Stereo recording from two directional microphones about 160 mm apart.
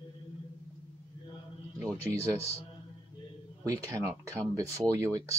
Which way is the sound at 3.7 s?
20° right (ahead or behind).